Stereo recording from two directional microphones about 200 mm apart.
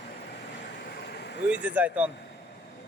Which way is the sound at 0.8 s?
55° left (ahead or behind).